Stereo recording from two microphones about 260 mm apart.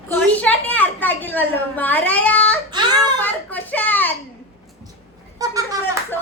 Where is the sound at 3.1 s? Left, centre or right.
Centre.